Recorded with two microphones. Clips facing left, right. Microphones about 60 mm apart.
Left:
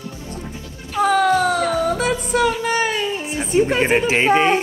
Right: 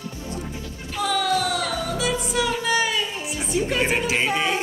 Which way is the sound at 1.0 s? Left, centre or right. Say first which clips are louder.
Left 7 dB; left.